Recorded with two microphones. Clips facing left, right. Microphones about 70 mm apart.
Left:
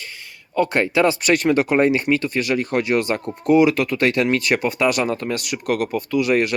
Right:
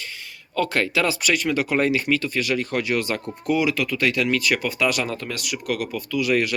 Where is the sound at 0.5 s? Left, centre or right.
Left.